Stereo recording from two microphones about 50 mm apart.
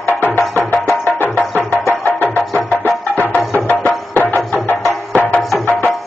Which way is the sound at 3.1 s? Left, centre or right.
Left.